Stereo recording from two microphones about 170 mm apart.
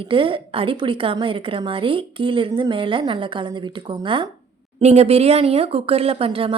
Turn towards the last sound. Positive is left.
turn(degrees=-35)  # may be behind; listen again after turning